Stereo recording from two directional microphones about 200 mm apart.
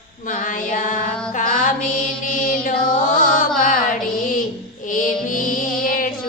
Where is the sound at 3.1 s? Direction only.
45° left (ahead or behind).